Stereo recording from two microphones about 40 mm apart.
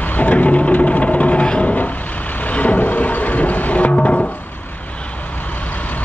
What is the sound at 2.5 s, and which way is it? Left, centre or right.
Vehicle, left.